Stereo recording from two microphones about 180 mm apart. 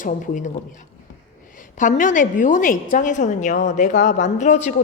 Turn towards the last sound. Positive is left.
turn(degrees=40)  # may be behind; listen again after turning